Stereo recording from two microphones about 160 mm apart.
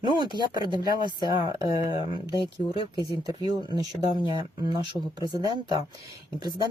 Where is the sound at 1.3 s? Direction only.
25° right (ahead or behind).